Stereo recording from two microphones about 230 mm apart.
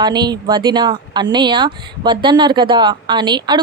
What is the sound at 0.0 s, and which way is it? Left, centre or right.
Speech, centre.